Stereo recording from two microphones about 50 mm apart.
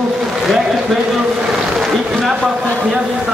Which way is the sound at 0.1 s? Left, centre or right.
Centre.